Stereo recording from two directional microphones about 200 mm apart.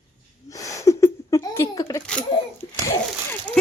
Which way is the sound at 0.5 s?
15° left (ahead or behind).